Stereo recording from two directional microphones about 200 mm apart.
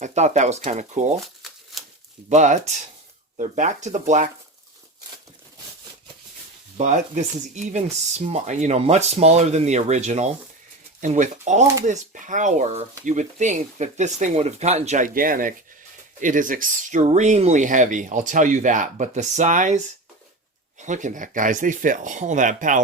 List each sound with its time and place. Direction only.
0.0 s speech: 35° right (ahead or behind)
1.2 s shuffling cards: centre (ahead or behind)
2.3 s speech: 35° right (ahead or behind)
6.7 s speech: 35° right (ahead or behind)